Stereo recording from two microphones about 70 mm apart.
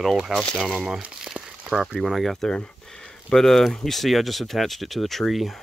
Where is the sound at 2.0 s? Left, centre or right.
Centre.